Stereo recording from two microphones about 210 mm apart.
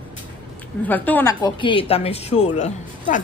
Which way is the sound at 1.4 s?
25° left (ahead or behind).